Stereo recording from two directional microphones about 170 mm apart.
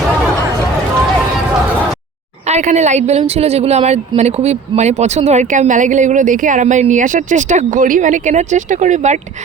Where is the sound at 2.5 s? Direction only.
45° right (ahead or behind).